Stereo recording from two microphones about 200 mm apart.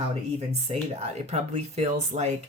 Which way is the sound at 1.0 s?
30° right (ahead or behind).